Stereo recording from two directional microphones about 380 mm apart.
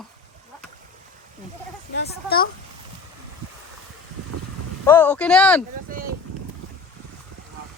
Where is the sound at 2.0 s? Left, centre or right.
Left.